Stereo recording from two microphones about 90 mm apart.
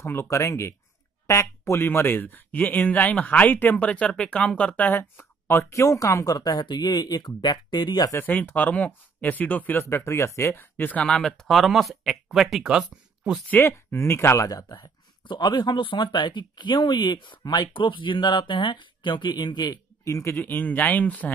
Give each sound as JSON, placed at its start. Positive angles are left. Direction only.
{"t": 0.0, "sound": "speech", "side_deg": 30}
{"t": 8.2, "sound": "speech", "side_deg": 20}
{"t": 11.1, "sound": "speech", "side_deg": 5}
{"t": 13.5, "sound": "speech", "side_deg": 25}
{"t": 20.2, "sound": "speech", "side_deg": 30}